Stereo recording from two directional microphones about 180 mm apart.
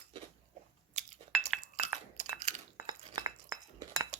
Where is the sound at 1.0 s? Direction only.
40° right (ahead or behind).